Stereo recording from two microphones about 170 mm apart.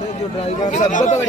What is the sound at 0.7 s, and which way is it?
Speech, 45° left (ahead or behind).